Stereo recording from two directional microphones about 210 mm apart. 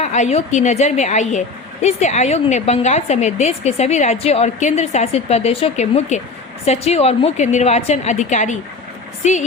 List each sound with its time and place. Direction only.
0.0 s a woman's voice: 35° left (ahead or behind)